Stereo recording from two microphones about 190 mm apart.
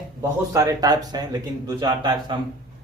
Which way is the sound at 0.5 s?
20° right (ahead or behind).